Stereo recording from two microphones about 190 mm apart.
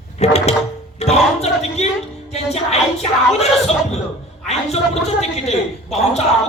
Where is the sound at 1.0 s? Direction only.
35° left (ahead or behind).